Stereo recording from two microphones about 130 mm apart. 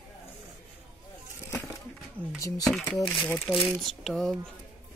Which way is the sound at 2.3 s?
25° left (ahead or behind).